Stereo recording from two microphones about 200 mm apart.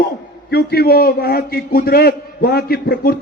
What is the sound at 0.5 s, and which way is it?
A man's voice, 50° left (ahead or behind).